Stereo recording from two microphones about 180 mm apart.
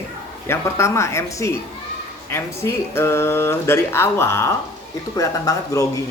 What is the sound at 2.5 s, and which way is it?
Speech, 15° left (ahead or behind).